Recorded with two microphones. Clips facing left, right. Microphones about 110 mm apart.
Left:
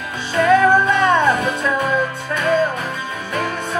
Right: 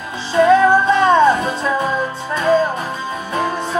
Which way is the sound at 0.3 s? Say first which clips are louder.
Right 2 dB; 25° right (ahead or behind).